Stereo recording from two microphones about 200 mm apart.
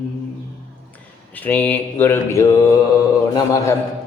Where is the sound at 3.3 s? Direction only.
15° left (ahead or behind).